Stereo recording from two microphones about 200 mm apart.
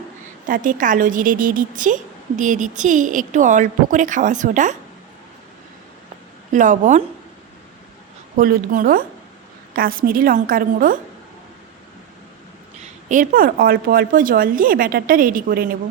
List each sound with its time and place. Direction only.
0.4 s a woman's voice: 40° right (ahead or behind)
6.5 s a woman's voice: 40° right (ahead or behind)
8.4 s a woman's voice: 45° right (ahead or behind)
13.1 s a woman's voice: 45° right (ahead or behind)